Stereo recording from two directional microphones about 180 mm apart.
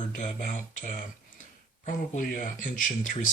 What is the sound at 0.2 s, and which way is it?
Speech, 45° left (ahead or behind).